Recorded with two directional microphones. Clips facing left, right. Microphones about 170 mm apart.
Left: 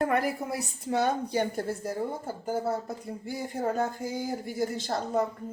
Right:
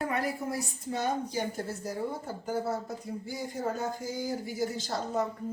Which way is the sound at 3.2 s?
60° left (ahead or behind).